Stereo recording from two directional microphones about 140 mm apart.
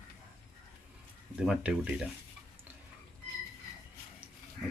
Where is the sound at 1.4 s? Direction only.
5° right (ahead or behind).